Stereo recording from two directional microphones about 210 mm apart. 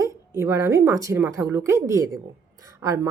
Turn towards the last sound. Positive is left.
turn(degrees=-15)  # may be behind; listen again after turning